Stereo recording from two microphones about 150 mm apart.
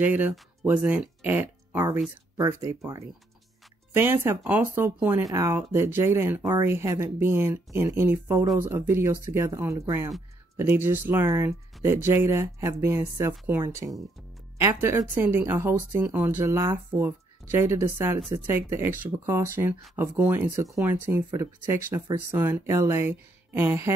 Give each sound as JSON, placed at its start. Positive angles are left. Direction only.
{"t": 0.0, "sound": "speech", "side_deg": -10}